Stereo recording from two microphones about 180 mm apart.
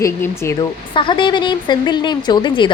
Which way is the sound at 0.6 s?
25° left (ahead or behind).